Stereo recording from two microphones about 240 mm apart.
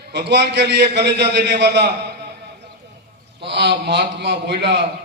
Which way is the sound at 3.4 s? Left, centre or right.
Right.